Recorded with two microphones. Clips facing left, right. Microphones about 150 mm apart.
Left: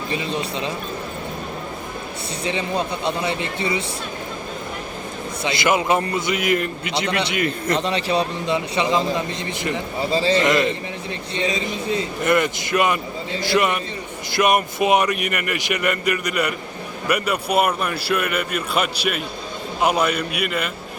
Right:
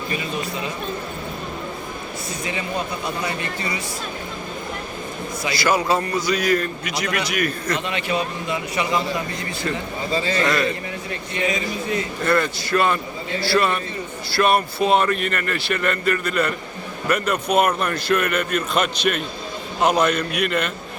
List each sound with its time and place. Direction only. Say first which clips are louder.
0.1 s a man's voice: left 3 dB; 25° left (ahead or behind)
2.4 s a man's voice: left 4 dB; 30° left (ahead or behind)
5.4 s a man's voice: left 1 dB; 20° left (ahead or behind); by 20.7 s 5° left (ahead or behind)